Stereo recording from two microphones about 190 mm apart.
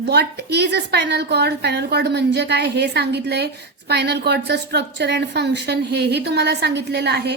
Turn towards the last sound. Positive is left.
turn(degrees=-60)  # may be behind; listen again after turning